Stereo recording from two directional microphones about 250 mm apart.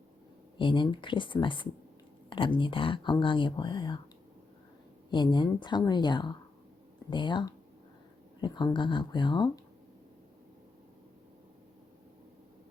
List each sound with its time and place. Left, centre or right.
0.5 s speech: centre
5.1 s speech: centre